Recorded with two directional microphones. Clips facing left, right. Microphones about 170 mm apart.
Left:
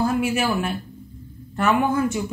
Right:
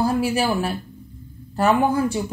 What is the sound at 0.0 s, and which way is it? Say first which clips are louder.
Speech: right 1 dB; 35° right (ahead or behind).